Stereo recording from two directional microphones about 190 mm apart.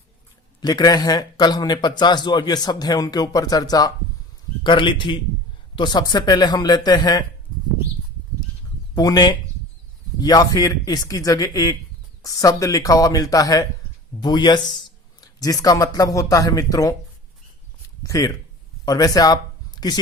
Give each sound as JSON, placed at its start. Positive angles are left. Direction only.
{"t": 0.6, "sound": "a man's voice", "side_deg": 20}
{"t": 9.0, "sound": "a man's voice", "side_deg": 20}
{"t": 18.0, "sound": "speech", "side_deg": 20}